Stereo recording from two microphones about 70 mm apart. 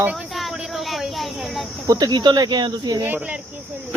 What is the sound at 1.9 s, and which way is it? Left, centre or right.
Speech, right.